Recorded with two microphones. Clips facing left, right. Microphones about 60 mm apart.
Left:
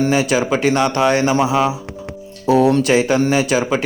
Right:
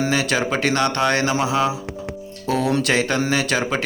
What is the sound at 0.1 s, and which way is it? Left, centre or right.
Speech, centre.